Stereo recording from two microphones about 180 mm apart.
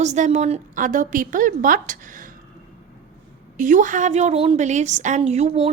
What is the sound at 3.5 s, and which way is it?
A woman's voice, 45° right (ahead or behind).